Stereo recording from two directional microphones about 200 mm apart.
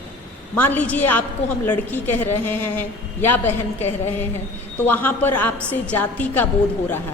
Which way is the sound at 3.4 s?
35° left (ahead or behind).